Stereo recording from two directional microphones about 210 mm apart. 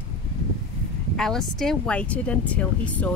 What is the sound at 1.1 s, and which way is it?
Speech, centre (ahead or behind).